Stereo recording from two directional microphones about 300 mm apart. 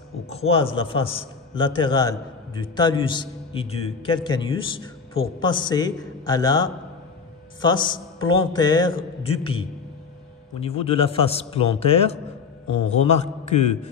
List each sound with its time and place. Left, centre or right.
0.3 s a man's voice: centre
10.6 s a man's voice: centre